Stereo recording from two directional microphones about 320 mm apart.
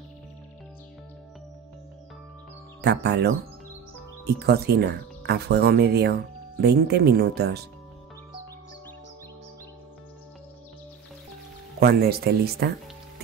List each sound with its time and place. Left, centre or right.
2.8 s speech: right
4.5 s speech: right
11.8 s speech: right